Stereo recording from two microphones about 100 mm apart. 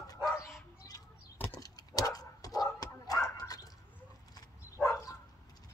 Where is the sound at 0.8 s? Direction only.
35° left (ahead or behind).